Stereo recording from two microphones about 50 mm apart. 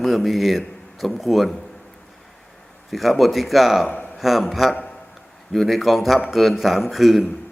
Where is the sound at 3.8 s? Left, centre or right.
Left.